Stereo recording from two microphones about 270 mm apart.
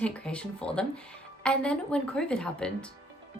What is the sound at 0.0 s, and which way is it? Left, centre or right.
A woman's voice, centre.